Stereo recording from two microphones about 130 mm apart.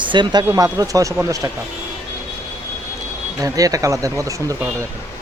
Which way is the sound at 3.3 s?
25° right (ahead or behind).